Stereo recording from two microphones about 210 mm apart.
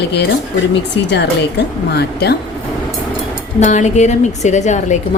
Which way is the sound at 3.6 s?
35° left (ahead or behind).